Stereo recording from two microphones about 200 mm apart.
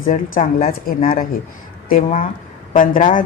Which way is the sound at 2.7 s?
40° left (ahead or behind).